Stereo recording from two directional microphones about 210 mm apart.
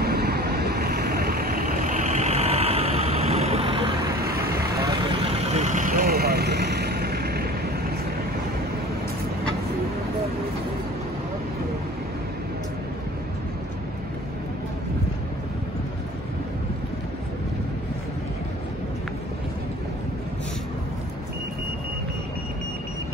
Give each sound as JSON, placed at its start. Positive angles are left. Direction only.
{"t": 0.0, "sound": "vehicle", "side_deg": -50}
{"t": 4.2, "sound": "vehicle", "side_deg": -45}
{"t": 4.8, "sound": "vehicle", "side_deg": -25}